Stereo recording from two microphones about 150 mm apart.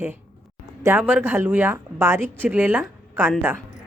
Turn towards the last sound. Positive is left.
turn(degrees=-15)  # may be behind; listen again after turning